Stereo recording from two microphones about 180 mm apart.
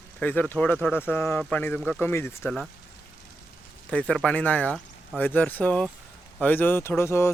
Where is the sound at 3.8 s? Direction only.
5° left (ahead or behind).